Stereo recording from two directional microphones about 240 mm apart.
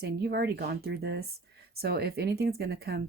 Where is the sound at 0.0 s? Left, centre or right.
Right.